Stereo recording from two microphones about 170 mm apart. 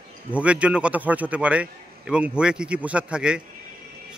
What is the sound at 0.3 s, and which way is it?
A man's voice, 5° right (ahead or behind).